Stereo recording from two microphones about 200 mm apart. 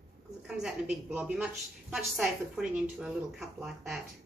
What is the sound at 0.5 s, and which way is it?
A woman's voice, 5° right (ahead or behind).